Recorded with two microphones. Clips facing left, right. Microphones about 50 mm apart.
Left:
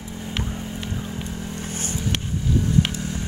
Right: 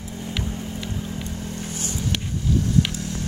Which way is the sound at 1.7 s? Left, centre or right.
Left.